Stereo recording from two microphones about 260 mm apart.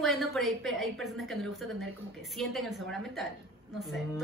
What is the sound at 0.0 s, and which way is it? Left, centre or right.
A woman's voice, centre.